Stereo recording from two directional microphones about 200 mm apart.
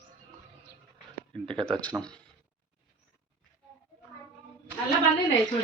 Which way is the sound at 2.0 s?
5° left (ahead or behind).